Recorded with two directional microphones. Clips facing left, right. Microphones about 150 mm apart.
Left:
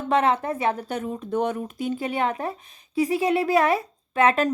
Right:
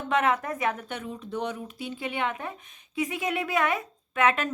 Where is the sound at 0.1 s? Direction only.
30° left (ahead or behind).